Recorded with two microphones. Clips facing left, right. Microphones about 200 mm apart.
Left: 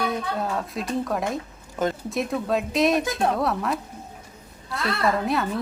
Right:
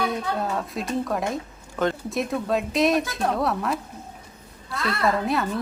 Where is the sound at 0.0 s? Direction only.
Centre (ahead or behind).